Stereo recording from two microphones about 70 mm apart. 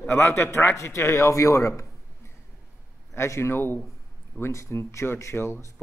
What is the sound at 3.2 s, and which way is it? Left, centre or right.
Speech, left.